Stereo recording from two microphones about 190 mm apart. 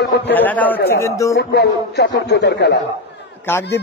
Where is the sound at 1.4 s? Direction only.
60° left (ahead or behind).